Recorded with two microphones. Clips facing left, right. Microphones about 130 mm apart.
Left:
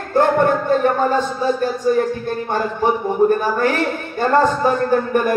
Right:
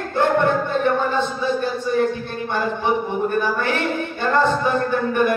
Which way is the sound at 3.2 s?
35° left (ahead or behind).